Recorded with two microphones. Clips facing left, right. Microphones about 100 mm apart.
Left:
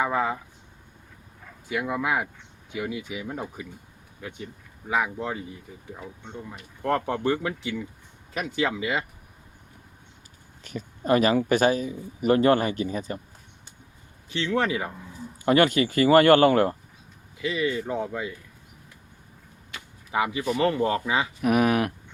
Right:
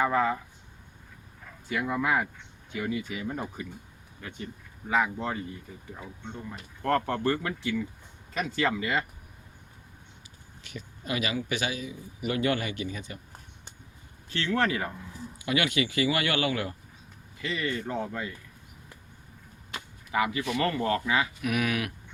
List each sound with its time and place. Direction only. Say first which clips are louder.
0.0 s speech: even; 10° left (ahead or behind)
1.7 s speech: left 1 dB; 10° left (ahead or behind)
6.8 s speech: left 2 dB; 15° left (ahead or behind)
10.6 s a man's voice: left 8 dB; 40° left (ahead or behind)
14.3 s speech: left 2 dB; 15° left (ahead or behind)
15.4 s speech: left 8 dB; 40° left (ahead or behind)
17.4 s speech: left 5 dB; 10° left (ahead or behind)
20.1 s speech: left 2 dB; 25° left (ahead or behind)
21.4 s a man's voice: left 7 dB; 40° left (ahead or behind)